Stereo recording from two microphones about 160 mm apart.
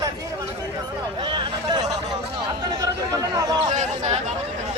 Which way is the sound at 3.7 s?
50° right (ahead or behind).